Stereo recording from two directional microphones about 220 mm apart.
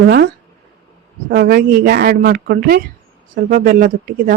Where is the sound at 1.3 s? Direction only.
45° right (ahead or behind).